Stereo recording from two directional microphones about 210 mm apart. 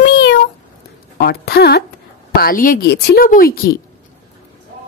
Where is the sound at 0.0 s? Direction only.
55° left (ahead or behind).